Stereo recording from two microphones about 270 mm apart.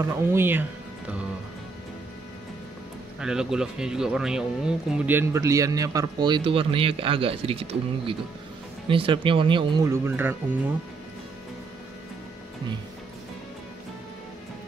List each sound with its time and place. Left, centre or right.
0.0 s speech: centre
3.2 s speech: centre